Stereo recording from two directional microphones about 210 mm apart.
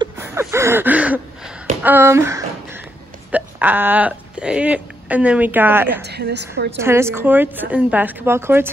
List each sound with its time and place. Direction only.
0.0 s a sound: 10° right (ahead or behind)
1.8 s speech: 10° right (ahead or behind)
6.0 s a woman's voice: 50° right (ahead or behind)
6.8 s a woman's voice: 10° right (ahead or behind)